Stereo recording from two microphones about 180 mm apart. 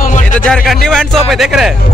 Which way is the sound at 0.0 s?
45° left (ahead or behind).